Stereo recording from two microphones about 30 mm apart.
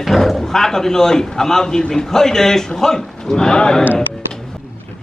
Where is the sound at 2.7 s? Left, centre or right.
Centre.